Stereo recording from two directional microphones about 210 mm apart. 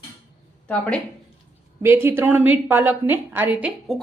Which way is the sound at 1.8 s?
10° right (ahead or behind).